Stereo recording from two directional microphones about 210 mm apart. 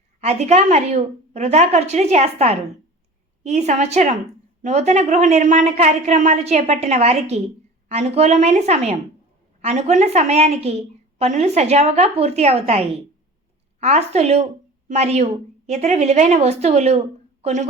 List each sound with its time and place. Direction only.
0.2 s a woman's voice: 30° right (ahead or behind)